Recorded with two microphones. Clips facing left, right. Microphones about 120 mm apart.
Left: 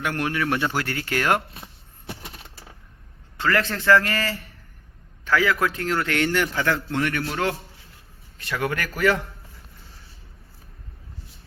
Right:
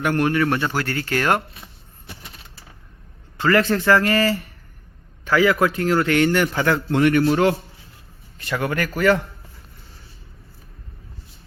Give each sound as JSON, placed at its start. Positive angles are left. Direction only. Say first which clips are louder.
{"t": 0.0, "sound": "a man's voice", "louder": "right 6 dB", "side_deg": 0}
{"t": 0.7, "sound": "speech", "louder": "right 3 dB", "side_deg": 15}
{"t": 3.4, "sound": "a man's voice", "louder": "right 4 dB", "side_deg": 0}
{"t": 7.0, "sound": "a man's voice", "louder": "right 13 dB", "side_deg": -25}
{"t": 8.4, "sound": "a man's voice", "louder": "right 3 dB", "side_deg": 0}